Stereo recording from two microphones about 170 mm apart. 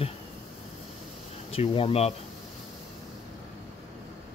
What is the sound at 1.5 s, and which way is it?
Speech, 35° left (ahead or behind).